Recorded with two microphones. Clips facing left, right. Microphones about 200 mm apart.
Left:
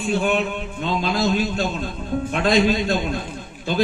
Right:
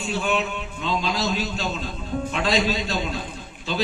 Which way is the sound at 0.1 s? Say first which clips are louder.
Left 4 dB; 55° left (ahead or behind).